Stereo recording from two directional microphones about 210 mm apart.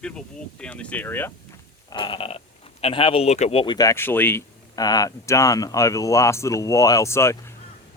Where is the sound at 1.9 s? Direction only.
25° left (ahead or behind).